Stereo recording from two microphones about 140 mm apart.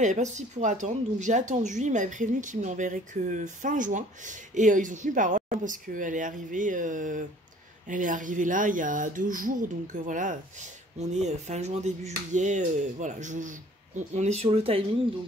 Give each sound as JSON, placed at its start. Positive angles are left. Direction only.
{"t": 0.0, "sound": "a woman's voice", "side_deg": -60}